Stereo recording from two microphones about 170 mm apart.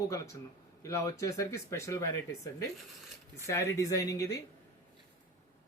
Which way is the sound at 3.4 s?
15° left (ahead or behind).